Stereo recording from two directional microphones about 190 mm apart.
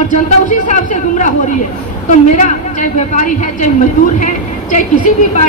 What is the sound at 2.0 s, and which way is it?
A woman's voice, 40° left (ahead or behind).